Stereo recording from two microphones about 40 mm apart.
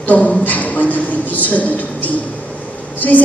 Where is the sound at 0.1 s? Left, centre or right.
Left.